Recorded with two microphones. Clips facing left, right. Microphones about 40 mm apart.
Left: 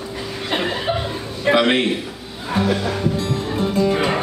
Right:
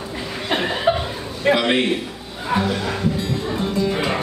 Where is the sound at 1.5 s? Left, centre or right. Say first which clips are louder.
Left 2 dB; centre.